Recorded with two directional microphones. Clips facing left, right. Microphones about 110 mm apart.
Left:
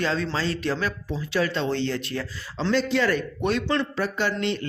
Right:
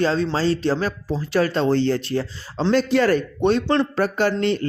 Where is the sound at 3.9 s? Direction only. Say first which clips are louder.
Right 6 dB; 45° right (ahead or behind).